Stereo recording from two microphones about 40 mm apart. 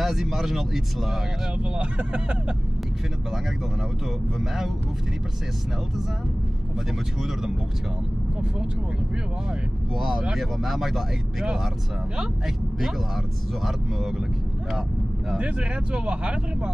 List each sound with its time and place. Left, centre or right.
0.0 s speech: centre
1.6 s speech: right
9.9 s speech: centre
15.3 s speech: right